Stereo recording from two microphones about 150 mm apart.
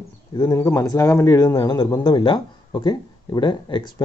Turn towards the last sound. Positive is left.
turn(degrees=30)  # may be behind; listen again after turning